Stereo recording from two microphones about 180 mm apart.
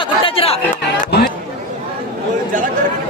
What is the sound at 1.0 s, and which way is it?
Chatter, 55° left (ahead or behind).